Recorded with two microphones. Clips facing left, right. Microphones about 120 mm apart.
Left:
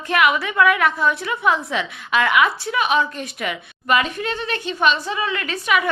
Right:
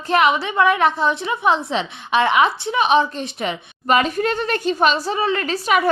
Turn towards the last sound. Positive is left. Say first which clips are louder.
# right 2 dB
turn(degrees=-35)  # may be behind; listen again after turning